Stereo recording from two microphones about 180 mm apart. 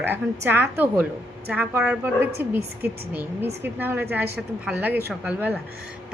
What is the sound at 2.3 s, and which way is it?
Speech, 60° right (ahead or behind).